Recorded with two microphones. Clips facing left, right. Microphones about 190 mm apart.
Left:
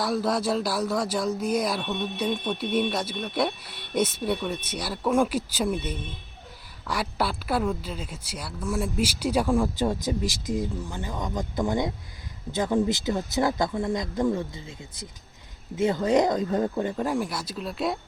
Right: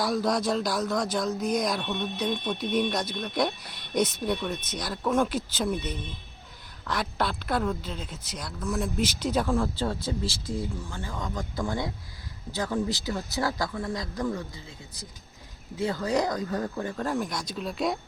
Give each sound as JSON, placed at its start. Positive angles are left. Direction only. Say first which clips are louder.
{"t": 0.0, "sound": "a woman's voice", "louder": "left 1 dB", "side_deg": 5}